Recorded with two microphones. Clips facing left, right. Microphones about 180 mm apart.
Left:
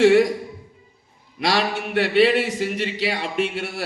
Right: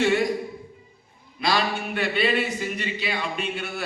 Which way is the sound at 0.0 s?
90° left.